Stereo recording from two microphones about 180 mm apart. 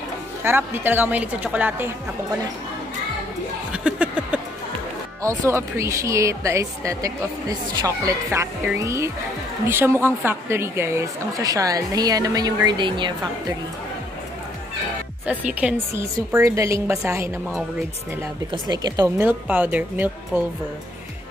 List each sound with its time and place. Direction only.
0.4 s speech: 10° right (ahead or behind)
3.7 s a sound: 5° right (ahead or behind)
5.5 s a woman's voice: 15° right (ahead or behind)
15.2 s speech: 5° right (ahead or behind)
18.5 s speech: 20° right (ahead or behind)